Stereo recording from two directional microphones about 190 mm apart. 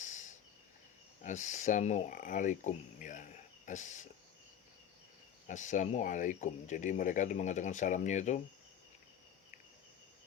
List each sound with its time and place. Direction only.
0.0 s a sound: 40° left (ahead or behind)
1.2 s speech: 40° left (ahead or behind)
5.5 s speech: 40° left (ahead or behind)